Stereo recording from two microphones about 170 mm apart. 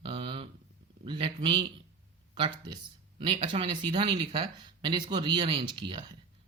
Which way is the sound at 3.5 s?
30° right (ahead or behind).